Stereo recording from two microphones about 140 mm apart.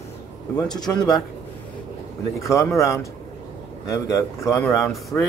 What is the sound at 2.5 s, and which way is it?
Speech, 20° left (ahead or behind).